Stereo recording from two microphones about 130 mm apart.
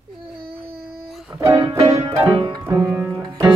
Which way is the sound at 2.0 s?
25° right (ahead or behind).